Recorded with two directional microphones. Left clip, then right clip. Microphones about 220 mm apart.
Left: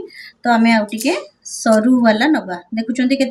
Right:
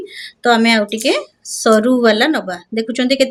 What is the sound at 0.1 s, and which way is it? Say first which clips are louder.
Speech: right 3 dB; 45° right (ahead or behind).